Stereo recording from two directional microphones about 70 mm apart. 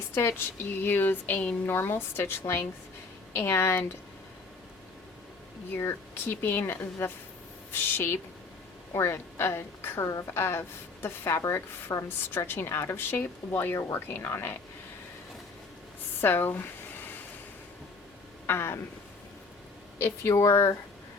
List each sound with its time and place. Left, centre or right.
0.1 s speech: left
5.7 s speech: left
11.4 s speech: left
12.5 s speech: left
16.2 s speech: left
18.4 s speech: left
20.0 s speech: left